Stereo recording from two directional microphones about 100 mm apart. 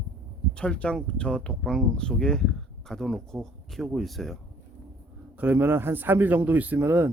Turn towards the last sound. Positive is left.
turn(degrees=-15)  # may be behind; listen again after turning